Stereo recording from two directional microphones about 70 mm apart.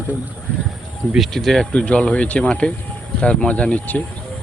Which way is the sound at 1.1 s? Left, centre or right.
Centre.